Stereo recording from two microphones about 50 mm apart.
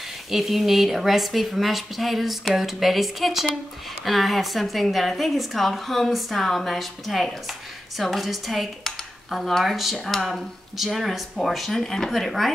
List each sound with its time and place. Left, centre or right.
0.3 s speech: centre